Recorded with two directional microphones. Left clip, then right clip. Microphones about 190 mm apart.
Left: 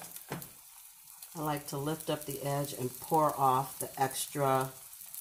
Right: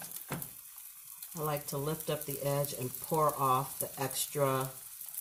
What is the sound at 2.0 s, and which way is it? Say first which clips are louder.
Frying: even; 25° left (ahead or behind).